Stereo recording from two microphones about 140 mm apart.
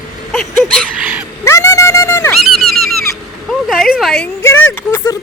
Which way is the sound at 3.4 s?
Centre (ahead or behind).